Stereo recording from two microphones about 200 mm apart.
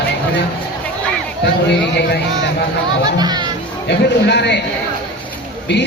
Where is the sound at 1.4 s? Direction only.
55° left (ahead or behind).